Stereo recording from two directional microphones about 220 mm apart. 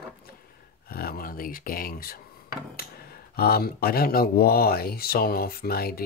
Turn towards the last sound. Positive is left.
turn(degrees=45)  # may be behind; listen again after turning